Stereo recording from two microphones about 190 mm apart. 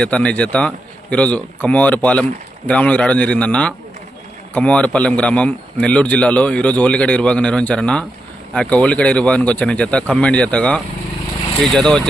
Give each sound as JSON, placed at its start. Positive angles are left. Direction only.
{"t": 0.0, "sound": "a man's voice", "side_deg": 5}